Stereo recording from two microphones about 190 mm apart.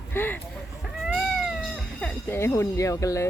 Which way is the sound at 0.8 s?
Centre (ahead or behind).